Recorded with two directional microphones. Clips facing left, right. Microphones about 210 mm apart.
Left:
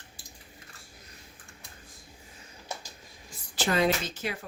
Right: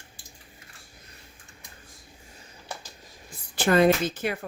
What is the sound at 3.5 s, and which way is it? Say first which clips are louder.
Speech: right 6 dB; 55° right (ahead or behind).